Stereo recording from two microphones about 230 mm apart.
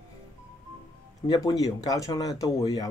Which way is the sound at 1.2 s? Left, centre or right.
Centre.